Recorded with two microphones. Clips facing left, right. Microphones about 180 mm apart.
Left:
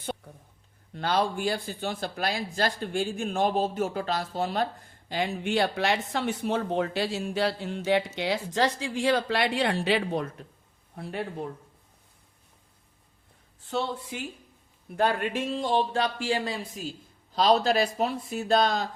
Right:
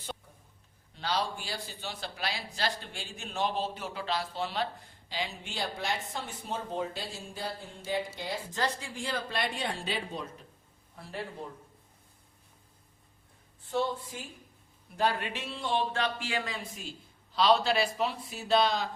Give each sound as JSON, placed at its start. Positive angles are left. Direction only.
{"t": 0.9, "sound": "speech", "side_deg": 50}
{"t": 13.7, "sound": "speech", "side_deg": 80}
{"t": 14.9, "sound": "speech", "side_deg": 55}